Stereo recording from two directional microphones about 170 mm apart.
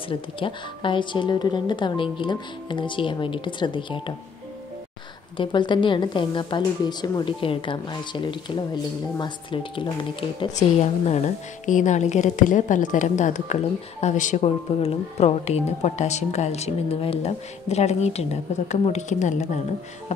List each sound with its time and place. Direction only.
0.1 s a woman's voice: 30° left (ahead or behind)
5.4 s a woman's voice: 30° left (ahead or behind)
10.5 s a woman's voice: 40° left (ahead or behind)